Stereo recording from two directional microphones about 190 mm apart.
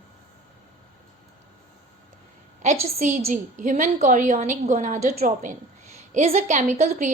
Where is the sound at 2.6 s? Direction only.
40° right (ahead or behind).